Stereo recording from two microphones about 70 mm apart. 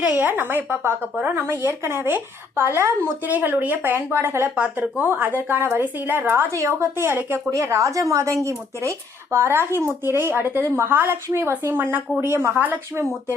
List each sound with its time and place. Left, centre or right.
0.2 s a woman's voice: right
1.4 s speech: right
4.5 s a woman's voice: centre
6.6 s speech: right
7.5 s speech: right
12.2 s speech: right